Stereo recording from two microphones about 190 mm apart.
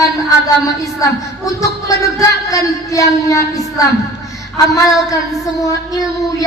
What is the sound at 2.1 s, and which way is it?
A woman's voice, 15° left (ahead or behind).